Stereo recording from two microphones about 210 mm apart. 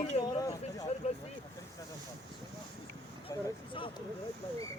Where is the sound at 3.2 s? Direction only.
25° left (ahead or behind).